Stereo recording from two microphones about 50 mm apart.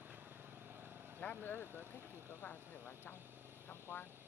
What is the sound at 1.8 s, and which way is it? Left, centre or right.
Speech, right.